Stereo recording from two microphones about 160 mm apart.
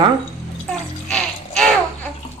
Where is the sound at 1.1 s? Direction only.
5° left (ahead or behind).